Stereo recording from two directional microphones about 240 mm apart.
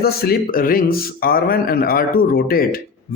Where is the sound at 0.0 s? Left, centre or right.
Left.